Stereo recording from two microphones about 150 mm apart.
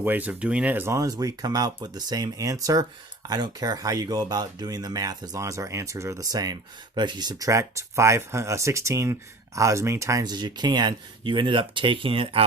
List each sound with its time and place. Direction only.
0.0 s speech: 10° right (ahead or behind); by 12.5 s 40° right (ahead or behind)